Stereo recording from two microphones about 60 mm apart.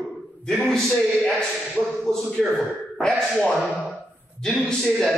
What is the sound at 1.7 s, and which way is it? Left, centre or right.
Speech, centre.